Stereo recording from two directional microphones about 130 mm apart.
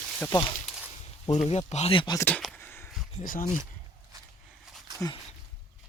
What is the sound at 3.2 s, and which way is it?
Speech, 90° left.